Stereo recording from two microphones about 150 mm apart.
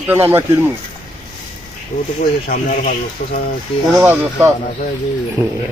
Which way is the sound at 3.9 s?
15° right (ahead or behind).